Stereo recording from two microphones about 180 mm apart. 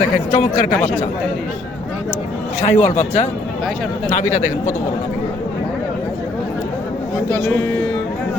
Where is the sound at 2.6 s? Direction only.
40° left (ahead or behind).